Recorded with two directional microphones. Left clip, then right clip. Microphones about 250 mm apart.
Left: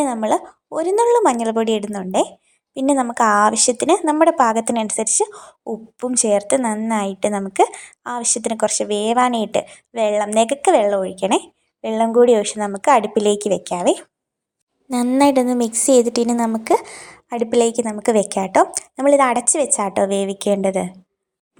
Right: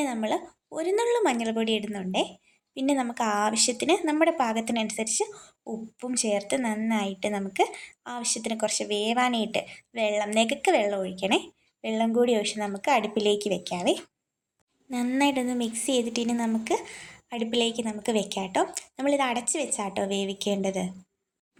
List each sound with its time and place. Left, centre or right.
0.0 s speech: left